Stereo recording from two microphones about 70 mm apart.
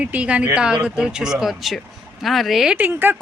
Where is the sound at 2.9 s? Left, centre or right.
Right.